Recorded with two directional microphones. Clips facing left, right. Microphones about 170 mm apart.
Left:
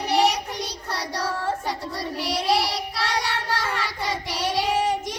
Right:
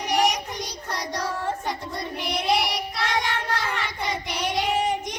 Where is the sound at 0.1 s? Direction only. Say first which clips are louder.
Left 2 dB; 15° right (ahead or behind).